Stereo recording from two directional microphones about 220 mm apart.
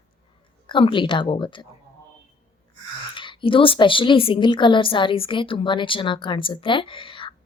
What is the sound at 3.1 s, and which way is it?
A woman's voice, 20° left (ahead or behind).